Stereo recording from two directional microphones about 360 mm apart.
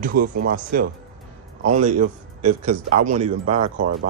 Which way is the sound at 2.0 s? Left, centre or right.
Right.